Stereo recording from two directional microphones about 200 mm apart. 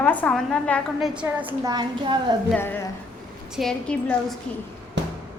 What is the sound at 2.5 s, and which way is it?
A woman's voice, 10° left (ahead or behind).